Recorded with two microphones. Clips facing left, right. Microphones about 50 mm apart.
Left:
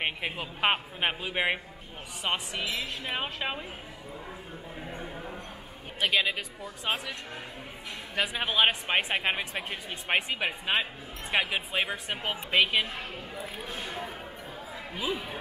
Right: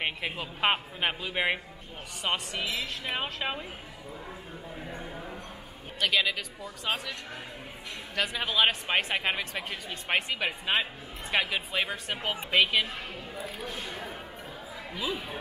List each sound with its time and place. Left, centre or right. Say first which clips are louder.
0.0 s speech: even; centre
4.7 s a sound: left 1 dB; centre
5.9 s a man's voice: even; centre
8.2 s speech: left 1 dB; centre
15.0 s speech: left 1 dB; left